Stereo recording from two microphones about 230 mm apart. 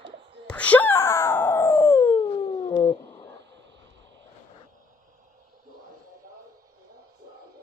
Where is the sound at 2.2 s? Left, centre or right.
Left.